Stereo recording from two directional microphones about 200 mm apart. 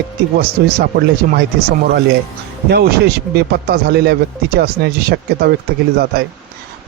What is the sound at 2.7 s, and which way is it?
Speech, 55° right (ahead or behind).